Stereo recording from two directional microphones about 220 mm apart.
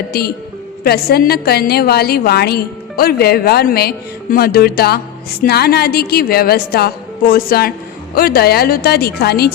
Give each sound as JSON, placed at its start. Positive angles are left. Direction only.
{"t": 0.1, "sound": "a woman's voice", "side_deg": 45}